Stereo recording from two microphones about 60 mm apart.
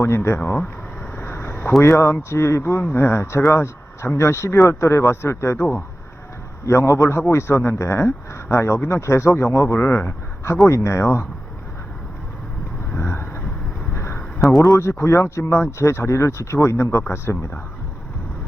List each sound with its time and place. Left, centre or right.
0.0 s speech: left
0.3 s speech: left
1.1 s a sound: left
1.8 s speech: left
6.7 s a man's voice: left
9.7 s speech: left
13.0 s vehicle: left
13.9 s a sound: left
14.6 s speech: left
17.0 s speech: left